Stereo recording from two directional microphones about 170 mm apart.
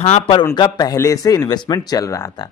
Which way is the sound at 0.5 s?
25° left (ahead or behind).